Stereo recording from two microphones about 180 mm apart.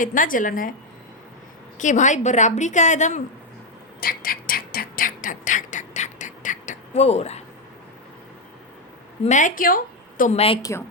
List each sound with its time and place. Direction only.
0.0 s a woman's voice: 50° left (ahead or behind)
1.8 s a woman's voice: 45° left (ahead or behind)
4.0 s a sound: 55° left (ahead or behind); by 7.4 s 35° left (ahead or behind)
9.2 s a woman's voice: 45° left (ahead or behind)
10.3 s a woman's voice: 30° left (ahead or behind)
10.6 s a woman's voice: 15° left (ahead or behind)